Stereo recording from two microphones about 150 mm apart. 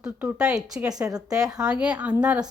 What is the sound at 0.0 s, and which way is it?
A woman's voice, 5° right (ahead or behind).